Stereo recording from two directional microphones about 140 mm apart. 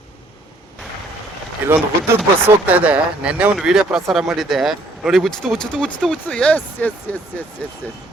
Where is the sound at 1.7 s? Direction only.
15° right (ahead or behind); by 7.1 s 10° left (ahead or behind).